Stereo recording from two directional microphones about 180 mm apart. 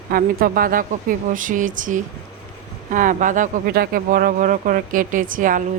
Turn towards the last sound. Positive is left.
turn(degrees=-45)  # may be behind; listen again after turning